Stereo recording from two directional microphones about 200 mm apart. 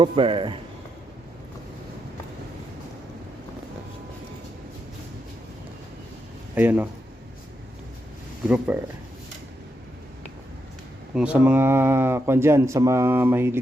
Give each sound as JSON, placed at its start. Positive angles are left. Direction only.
{"t": 0.0, "sound": "a man's voice", "side_deg": -25}
{"t": 6.5, "sound": "speech", "side_deg": -10}
{"t": 8.4, "sound": "speech", "side_deg": -5}
{"t": 11.1, "sound": "speech", "side_deg": -5}